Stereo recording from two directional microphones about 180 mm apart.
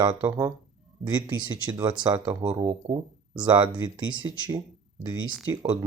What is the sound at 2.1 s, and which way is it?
Speech, 10° right (ahead or behind).